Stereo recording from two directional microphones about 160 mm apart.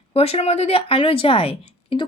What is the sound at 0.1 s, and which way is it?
Speech, 40° left (ahead or behind).